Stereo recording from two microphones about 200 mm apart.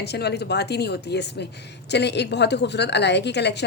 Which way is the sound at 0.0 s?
55° left (ahead or behind).